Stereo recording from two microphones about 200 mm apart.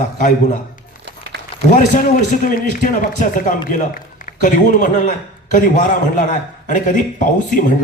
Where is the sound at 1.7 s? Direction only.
40° left (ahead or behind).